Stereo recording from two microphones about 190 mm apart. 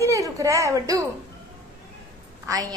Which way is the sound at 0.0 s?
15° right (ahead or behind).